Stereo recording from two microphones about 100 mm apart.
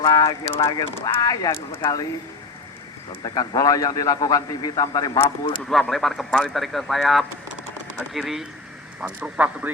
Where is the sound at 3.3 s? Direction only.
40° left (ahead or behind).